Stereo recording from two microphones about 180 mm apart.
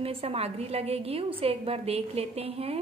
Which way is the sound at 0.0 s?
35° right (ahead or behind).